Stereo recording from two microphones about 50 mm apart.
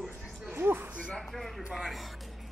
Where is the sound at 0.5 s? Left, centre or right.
Right.